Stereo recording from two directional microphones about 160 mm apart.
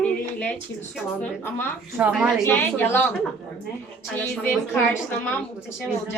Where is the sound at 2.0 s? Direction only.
10° right (ahead or behind).